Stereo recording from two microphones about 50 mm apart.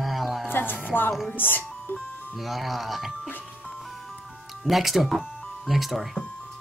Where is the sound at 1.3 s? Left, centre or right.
Left.